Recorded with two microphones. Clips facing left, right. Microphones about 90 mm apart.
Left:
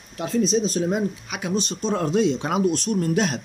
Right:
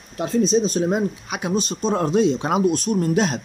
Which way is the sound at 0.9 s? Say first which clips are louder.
Right 2 dB; 25° right (ahead or behind).